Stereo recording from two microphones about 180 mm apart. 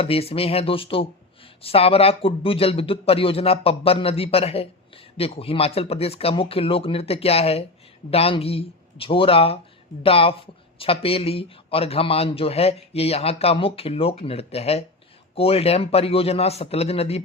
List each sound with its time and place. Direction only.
0.0 s speech: 30° left (ahead or behind)